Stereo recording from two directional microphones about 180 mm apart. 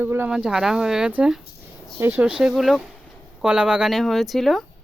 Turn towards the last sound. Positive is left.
turn(degrees=0)  # may be behind; listen again after turning